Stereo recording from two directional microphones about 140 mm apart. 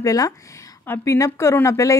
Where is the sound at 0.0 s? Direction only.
25° left (ahead or behind).